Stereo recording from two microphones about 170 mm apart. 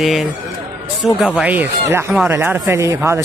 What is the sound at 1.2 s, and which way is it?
Speech, 5° right (ahead or behind).